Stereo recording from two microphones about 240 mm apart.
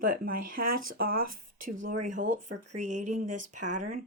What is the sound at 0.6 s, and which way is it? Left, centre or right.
Speech, right.